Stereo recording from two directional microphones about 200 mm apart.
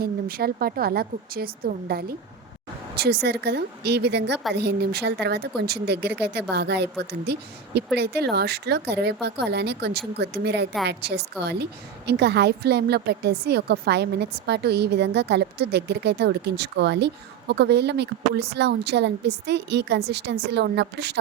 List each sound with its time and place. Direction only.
0.0 s a woman's voice: 50° right (ahead or behind)